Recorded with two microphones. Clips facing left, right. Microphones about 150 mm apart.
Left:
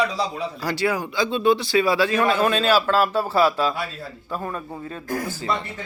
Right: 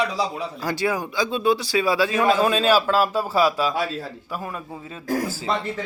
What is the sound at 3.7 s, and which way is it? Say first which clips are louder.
Speech: right 4 dB; 90° right.